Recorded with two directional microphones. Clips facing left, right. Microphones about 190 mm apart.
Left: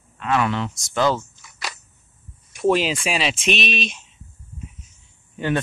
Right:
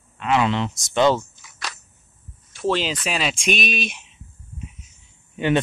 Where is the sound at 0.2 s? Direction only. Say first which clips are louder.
Right 1 dB; 20° right (ahead or behind).